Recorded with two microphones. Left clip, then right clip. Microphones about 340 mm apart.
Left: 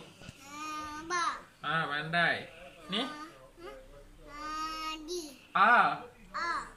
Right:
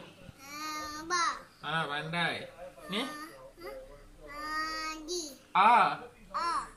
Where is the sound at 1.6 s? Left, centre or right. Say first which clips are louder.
Left 2 dB; centre.